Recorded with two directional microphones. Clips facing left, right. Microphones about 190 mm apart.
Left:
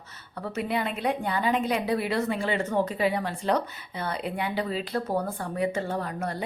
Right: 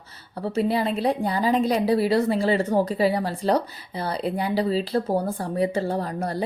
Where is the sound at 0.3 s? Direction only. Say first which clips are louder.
Right 6 dB; 30° right (ahead or behind).